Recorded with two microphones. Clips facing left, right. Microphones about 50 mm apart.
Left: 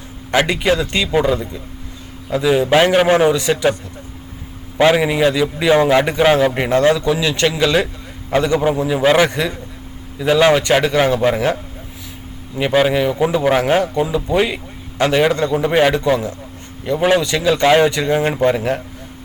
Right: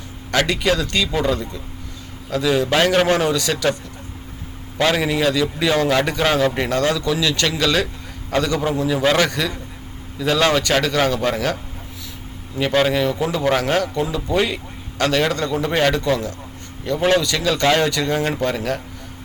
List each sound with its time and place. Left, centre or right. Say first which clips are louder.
0.3 s a man's voice: left 3 dB; left
4.8 s a man's voice: left 5 dB; centre